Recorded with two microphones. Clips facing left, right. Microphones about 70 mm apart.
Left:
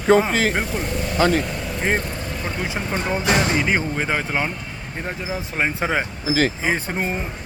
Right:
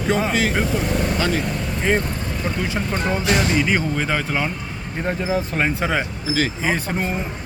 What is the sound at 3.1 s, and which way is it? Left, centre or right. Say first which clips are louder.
Speech: even; centre.